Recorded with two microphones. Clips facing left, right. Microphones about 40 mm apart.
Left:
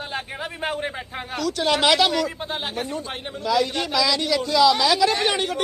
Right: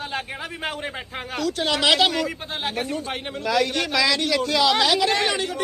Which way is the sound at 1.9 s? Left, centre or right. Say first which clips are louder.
Even; right.